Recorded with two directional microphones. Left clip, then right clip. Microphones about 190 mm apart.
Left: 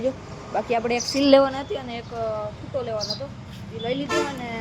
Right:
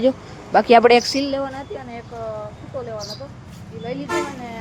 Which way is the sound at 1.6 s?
15° left (ahead or behind).